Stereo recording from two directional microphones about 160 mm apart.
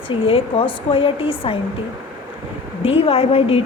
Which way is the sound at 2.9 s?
35° left (ahead or behind).